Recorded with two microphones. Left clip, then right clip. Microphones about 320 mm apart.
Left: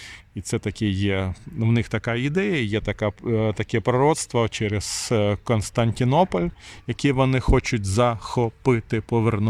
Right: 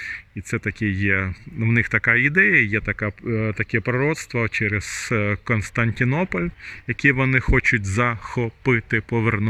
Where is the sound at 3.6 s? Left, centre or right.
Centre.